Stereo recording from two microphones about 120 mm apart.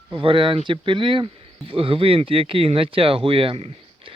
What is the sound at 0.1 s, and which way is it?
Speech, 45° right (ahead or behind).